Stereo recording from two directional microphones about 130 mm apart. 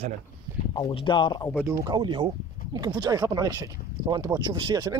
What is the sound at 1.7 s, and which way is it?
Speech, 30° right (ahead or behind).